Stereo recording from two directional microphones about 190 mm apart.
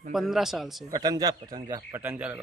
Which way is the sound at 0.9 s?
20° right (ahead or behind).